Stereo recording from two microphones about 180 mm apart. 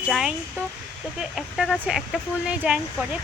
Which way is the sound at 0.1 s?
5° right (ahead or behind).